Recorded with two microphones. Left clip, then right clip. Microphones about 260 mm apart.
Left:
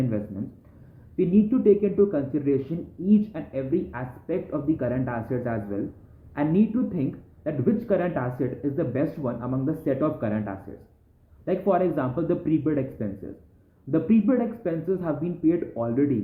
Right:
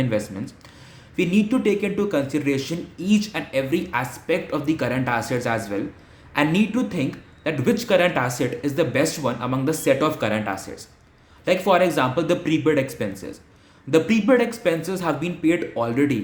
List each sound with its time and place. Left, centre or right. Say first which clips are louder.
1.1 s speech: right 2 dB; centre
14.1 s speech: right 5 dB; centre